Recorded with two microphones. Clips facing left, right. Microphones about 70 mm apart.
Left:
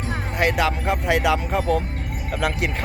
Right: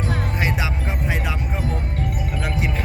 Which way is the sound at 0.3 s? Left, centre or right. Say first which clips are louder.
Left 4 dB; left.